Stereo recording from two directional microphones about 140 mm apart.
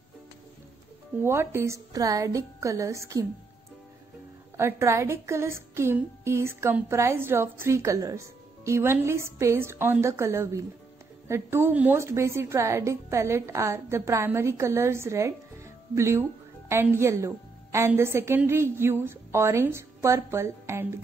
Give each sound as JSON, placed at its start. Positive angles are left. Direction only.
{"t": 1.2, "sound": "a woman's voice", "side_deg": -15}
{"t": 4.6, "sound": "a woman's voice", "side_deg": -20}